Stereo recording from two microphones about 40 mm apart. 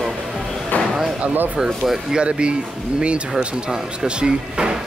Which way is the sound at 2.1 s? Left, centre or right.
Right.